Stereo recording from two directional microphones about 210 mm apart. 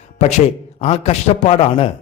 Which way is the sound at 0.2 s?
30° left (ahead or behind).